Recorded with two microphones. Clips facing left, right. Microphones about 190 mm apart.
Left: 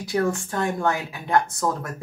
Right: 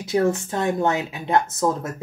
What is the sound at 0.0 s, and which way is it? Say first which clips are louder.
Speech: right 3 dB; 20° right (ahead or behind).